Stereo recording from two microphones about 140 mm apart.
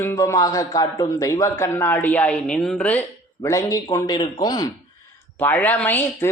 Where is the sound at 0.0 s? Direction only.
20° left (ahead or behind).